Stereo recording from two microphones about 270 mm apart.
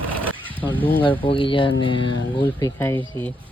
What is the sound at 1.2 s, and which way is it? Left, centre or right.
Speech, centre.